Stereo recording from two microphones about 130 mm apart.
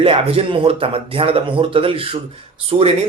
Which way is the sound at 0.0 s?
50° right (ahead or behind).